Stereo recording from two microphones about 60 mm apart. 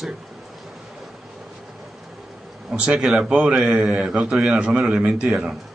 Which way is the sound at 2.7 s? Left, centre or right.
Centre.